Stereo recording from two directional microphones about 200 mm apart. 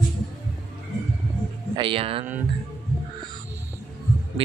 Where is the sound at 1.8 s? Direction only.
25° right (ahead or behind).